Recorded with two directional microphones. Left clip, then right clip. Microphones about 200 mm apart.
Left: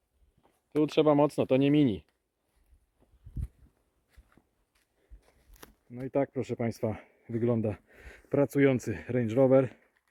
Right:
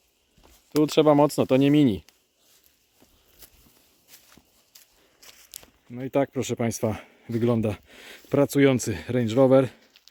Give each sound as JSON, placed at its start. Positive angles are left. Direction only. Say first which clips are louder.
{"t": 0.7, "sound": "speech", "louder": "right 6 dB", "side_deg": -20}
{"t": 5.9, "sound": "speech", "louder": "right 5 dB", "side_deg": -10}